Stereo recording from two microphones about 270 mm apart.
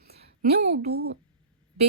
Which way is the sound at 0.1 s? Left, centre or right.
Right.